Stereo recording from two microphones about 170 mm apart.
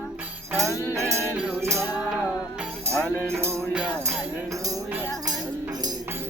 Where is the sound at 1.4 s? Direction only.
5° right (ahead or behind).